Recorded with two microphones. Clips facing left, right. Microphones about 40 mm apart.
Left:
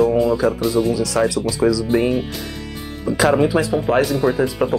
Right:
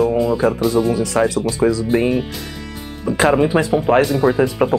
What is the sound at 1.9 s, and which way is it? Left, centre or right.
Speech, centre.